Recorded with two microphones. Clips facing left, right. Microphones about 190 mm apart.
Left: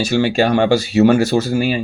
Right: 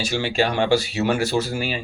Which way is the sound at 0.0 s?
45° left (ahead or behind).